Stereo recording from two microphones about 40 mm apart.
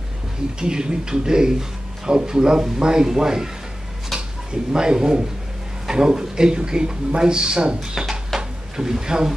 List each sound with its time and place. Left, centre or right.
0.6 s speech: centre
4.1 s a sound: centre
4.7 s speech: centre
8.4 s drawer open or close: centre